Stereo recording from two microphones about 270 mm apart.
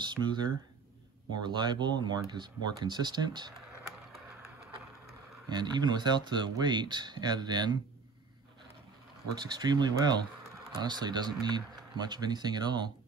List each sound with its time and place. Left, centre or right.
0.0 s speech: centre
5.5 s speech: centre
9.4 s speech: centre